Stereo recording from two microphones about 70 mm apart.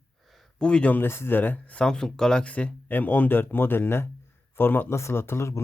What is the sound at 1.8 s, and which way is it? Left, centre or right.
Speech, centre.